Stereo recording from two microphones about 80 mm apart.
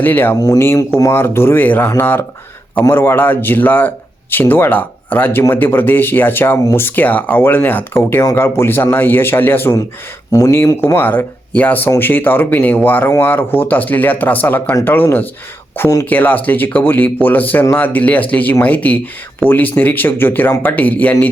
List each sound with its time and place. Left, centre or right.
0.0 s speech: left
0.3 s speech: left
1.1 s speech: left
10.3 s speech: left
10.9 s speech: left
16.0 s speech: left